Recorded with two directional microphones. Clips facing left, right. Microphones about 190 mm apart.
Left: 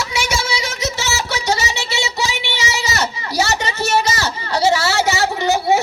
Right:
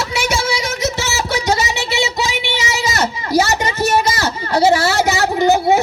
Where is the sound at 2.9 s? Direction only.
50° right (ahead or behind).